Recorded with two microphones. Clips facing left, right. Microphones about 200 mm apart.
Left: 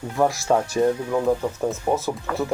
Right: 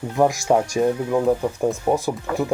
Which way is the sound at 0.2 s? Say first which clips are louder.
Right 2 dB; 15° right (ahead or behind).